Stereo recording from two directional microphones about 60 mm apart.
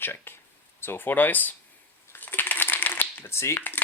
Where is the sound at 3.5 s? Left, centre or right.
Left.